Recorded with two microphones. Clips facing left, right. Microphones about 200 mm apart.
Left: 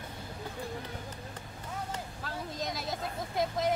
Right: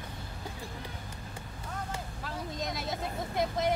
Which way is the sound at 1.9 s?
Centre (ahead or behind).